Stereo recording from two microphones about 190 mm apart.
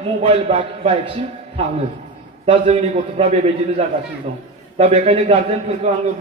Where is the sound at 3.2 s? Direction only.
35° right (ahead or behind).